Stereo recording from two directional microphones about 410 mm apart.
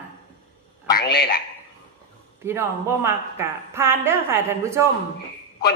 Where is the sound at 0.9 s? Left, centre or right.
Left.